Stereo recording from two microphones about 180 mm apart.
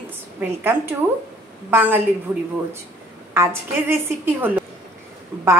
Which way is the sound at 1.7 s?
10° right (ahead or behind).